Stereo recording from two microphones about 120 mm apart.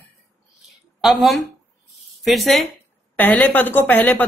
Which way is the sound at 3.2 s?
15° left (ahead or behind).